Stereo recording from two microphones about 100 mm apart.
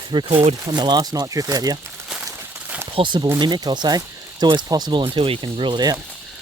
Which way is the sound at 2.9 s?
55° right (ahead or behind).